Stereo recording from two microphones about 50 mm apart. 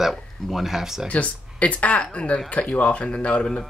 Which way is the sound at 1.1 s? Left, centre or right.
Left.